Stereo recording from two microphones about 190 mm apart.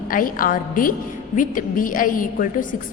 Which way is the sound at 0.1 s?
45° left (ahead or behind).